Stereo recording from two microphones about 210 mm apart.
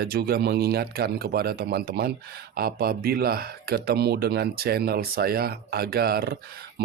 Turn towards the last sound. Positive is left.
turn(degrees=-45)  # may be behind; listen again after turning